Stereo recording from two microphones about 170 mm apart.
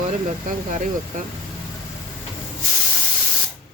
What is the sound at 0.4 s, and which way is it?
Speech, 45° right (ahead or behind).